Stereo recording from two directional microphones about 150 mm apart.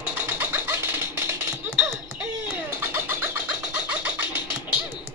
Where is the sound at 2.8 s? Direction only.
15° right (ahead or behind).